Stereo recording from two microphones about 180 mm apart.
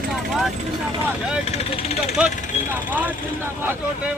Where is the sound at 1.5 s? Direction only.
35° left (ahead or behind).